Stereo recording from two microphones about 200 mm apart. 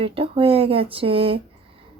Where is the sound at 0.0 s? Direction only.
30° right (ahead or behind).